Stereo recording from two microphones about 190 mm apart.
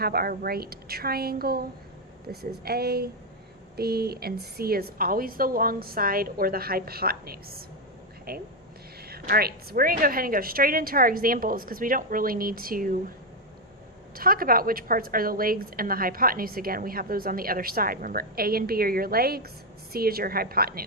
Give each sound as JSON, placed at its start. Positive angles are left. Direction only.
{"t": 0.0, "sound": "a woman's voice", "side_deg": -55}
{"t": 14.2, "sound": "a woman's voice", "side_deg": -50}